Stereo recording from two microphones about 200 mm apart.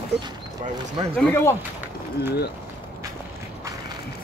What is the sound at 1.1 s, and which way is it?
Speech, 10° left (ahead or behind).